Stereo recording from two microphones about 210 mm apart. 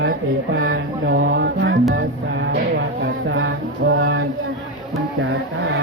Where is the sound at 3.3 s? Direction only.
60° right (ahead or behind).